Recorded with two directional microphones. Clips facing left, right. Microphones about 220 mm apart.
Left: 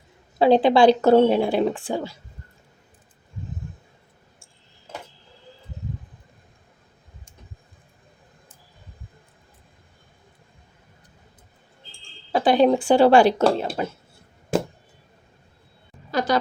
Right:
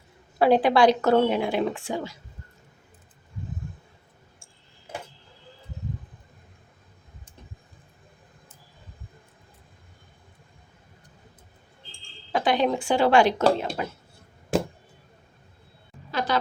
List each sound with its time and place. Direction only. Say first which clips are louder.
0.3 s speech: left 3 dB; 25° left (ahead or behind)
12.3 s speech: left 6 dB; 35° left (ahead or behind)
16.1 s a sound: left 4 dB; 40° left (ahead or behind)